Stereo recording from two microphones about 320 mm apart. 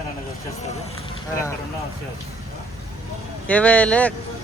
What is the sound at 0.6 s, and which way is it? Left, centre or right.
Speech, left.